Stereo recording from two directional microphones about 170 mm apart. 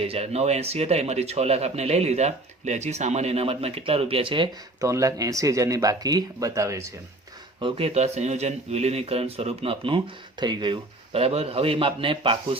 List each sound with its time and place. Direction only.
0.0 s speech: 35° right (ahead or behind)
4.8 s speech: 20° right (ahead or behind)
7.6 s speech: 35° right (ahead or behind)